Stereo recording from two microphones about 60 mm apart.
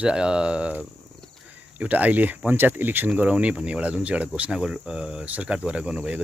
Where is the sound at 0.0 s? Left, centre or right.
Centre.